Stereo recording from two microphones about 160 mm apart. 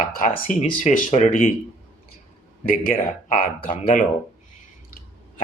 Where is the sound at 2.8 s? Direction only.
60° left (ahead or behind).